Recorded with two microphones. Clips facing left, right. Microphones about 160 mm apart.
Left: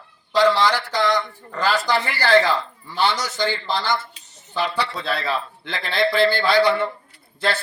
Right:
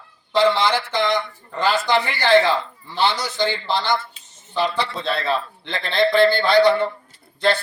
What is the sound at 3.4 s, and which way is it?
Speech, 20° right (ahead or behind).